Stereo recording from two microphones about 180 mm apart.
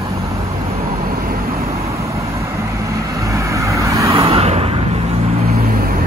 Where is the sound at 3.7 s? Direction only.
15° right (ahead or behind).